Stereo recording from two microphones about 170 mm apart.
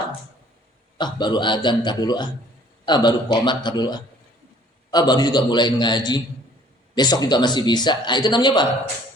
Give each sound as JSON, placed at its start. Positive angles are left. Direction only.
{"t": 0.9, "sound": "speech", "side_deg": 25}